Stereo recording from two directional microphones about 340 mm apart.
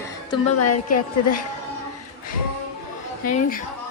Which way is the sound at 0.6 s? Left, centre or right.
Left.